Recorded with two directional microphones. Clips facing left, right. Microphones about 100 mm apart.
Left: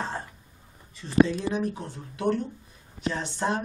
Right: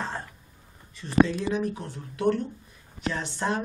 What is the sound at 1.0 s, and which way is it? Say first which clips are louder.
Speech: even; 30° left (ahead or behind).